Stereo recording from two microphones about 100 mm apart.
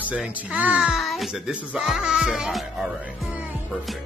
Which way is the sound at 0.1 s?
10° right (ahead or behind).